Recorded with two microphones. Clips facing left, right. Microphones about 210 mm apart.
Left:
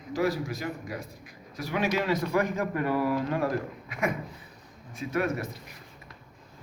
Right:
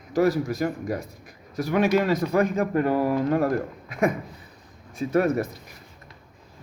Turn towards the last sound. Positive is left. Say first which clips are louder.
# right 7 dB
turn(degrees=-40)  # may be behind; listen again after turning